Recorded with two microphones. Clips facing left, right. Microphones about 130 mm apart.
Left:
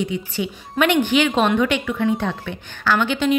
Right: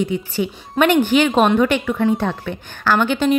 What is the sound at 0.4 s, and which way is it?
A woman's voice, 40° right (ahead or behind).